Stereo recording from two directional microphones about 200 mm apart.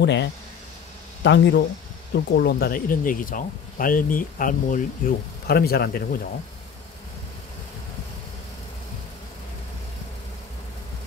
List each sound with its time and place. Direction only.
0.0 s speech: 60° left (ahead or behind)